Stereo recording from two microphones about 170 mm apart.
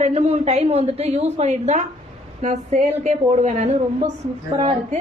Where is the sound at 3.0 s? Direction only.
45° right (ahead or behind).